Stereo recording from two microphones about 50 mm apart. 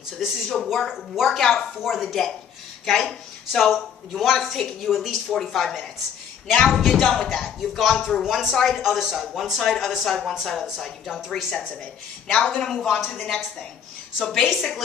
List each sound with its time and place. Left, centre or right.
0.5 s a woman's voice: centre
12.3 s a woman's voice: centre
12.5 s a woman's voice: centre